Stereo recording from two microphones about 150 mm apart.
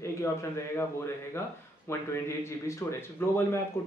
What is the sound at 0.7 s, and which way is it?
A man's voice, 15° left (ahead or behind).